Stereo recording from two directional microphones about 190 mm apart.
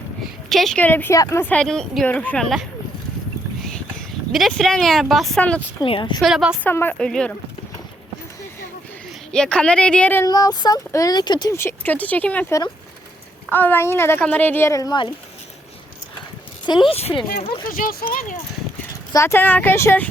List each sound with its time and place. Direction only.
0.5 s speech: centre (ahead or behind)
4.3 s speech: centre (ahead or behind)
5.8 s a woman's voice: 25° left (ahead or behind)
6.2 s speech: 5° right (ahead or behind)
6.7 s speech: 10° left (ahead or behind)
9.3 s speech: 5° left (ahead or behind); by 15.1 s 25° left (ahead or behind)
16.9 s speech: 30° left (ahead or behind)
17.7 s speech: 45° left (ahead or behind)
19.1 s speech: 15° left (ahead or behind)